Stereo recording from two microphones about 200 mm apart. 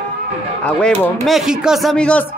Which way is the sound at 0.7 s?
5° left (ahead or behind).